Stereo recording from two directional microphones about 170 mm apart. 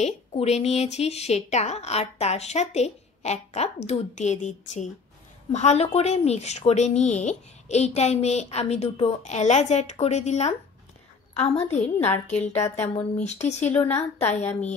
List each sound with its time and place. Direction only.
0.0 s a woman's voice: 40° left (ahead or behind)
11.7 s a woman's voice: 40° left (ahead or behind)
12.4 s speech: 15° left (ahead or behind)
12.8 s a woman's voice: 40° left (ahead or behind)